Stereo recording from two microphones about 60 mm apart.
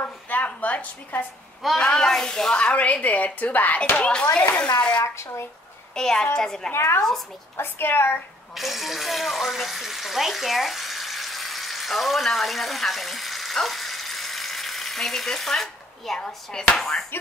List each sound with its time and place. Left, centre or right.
0.0 s a sound: left
1.8 s speech: centre
2.6 s a woman's voice: left
4.0 s a woman's voice: left
5.0 s speech: left
5.9 s speech: centre
6.7 s a woman's voice: left
8.5 s speech: centre